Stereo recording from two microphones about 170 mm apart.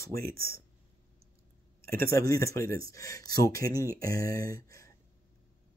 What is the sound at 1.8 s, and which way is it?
Speech, 15° left (ahead or behind).